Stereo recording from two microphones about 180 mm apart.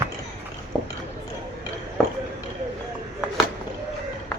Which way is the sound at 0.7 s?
Centre (ahead or behind).